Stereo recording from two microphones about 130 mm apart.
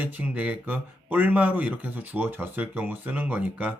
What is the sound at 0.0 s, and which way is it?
Speech, 10° right (ahead or behind).